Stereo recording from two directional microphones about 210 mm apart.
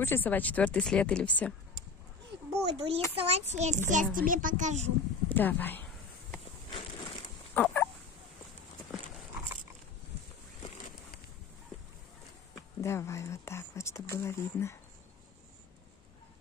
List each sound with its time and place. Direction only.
0.0 s speech: 10° left (ahead or behind)
2.5 s a child's voice: 25° right (ahead or behind)
5.3 s speech: 10° left (ahead or behind)
6.7 s a sound: 25° left (ahead or behind)
7.5 s fowl: 10° left (ahead or behind)
12.8 s speech: 15° left (ahead or behind)